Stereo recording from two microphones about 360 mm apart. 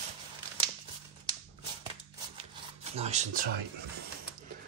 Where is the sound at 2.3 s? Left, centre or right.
Centre.